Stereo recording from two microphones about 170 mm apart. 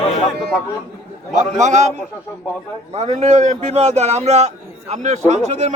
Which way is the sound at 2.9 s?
40° right (ahead or behind).